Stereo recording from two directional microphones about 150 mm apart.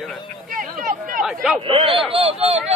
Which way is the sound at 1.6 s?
35° right (ahead or behind).